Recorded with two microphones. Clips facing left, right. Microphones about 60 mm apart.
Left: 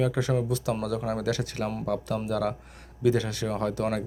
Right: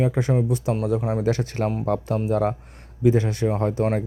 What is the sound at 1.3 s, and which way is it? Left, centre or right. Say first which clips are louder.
Speech: right 6 dB; right.